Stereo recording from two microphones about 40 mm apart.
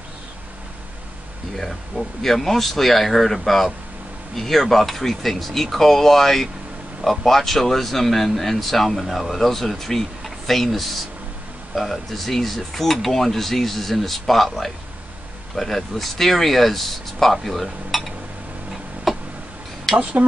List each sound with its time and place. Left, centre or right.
1.6 s speech: centre
19.1 s tick: centre
20.0 s speech: right